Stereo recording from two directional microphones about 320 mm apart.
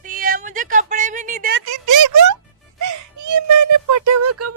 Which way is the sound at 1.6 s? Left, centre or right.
Right.